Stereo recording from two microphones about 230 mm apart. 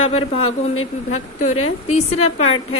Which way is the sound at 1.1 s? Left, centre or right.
Left.